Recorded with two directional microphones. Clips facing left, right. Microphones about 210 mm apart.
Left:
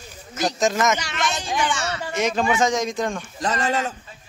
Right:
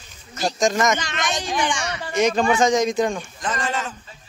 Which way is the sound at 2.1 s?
Centre (ahead or behind).